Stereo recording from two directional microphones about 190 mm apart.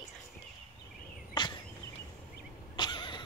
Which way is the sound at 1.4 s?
25° left (ahead or behind).